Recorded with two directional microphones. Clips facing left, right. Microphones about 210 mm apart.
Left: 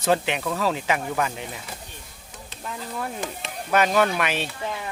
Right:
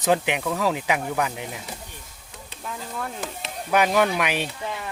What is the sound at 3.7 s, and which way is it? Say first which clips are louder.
Speech: even; 10° right (ahead or behind).